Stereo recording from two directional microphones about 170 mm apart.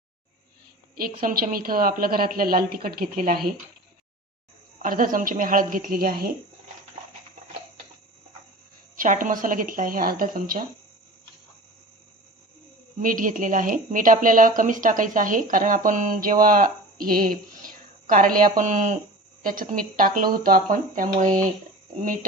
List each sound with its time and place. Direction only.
1.2 s a woman's voice: 55° right (ahead or behind)
4.8 s a woman's voice: 50° right (ahead or behind)
9.0 s speech: 50° right (ahead or behind)
13.0 s speech: 50° right (ahead or behind)